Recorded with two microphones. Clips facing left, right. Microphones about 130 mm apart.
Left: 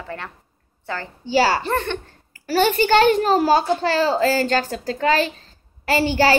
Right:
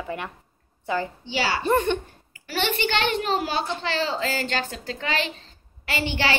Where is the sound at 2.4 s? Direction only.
40° left (ahead or behind).